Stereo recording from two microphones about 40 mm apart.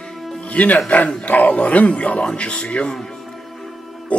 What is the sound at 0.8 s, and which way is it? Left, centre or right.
Speech, left.